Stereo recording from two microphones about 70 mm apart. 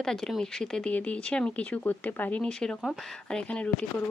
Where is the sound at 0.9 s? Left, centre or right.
Centre.